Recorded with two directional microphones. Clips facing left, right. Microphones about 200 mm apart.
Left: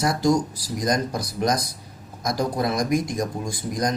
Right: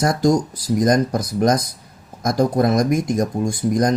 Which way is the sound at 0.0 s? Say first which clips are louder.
Right 4 dB; 45° right (ahead or behind).